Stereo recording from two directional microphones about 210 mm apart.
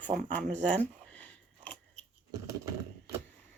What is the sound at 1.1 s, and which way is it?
Biting, 5° left (ahead or behind).